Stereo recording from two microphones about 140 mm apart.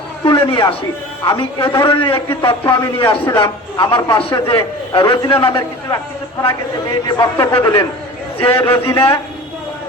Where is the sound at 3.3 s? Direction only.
30° left (ahead or behind).